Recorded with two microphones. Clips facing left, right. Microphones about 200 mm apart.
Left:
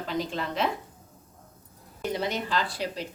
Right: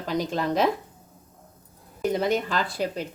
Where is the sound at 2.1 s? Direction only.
50° right (ahead or behind).